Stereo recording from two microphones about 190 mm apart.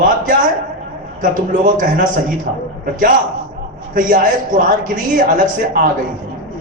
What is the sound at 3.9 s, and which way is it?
Speech, 45° right (ahead or behind).